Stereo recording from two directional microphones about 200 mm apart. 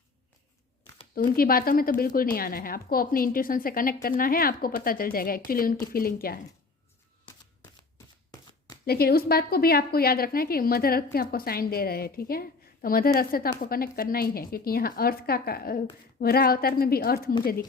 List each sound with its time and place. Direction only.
1.1 s a woman's voice: 45° left (ahead or behind)
8.9 s a woman's voice: 50° left (ahead or behind)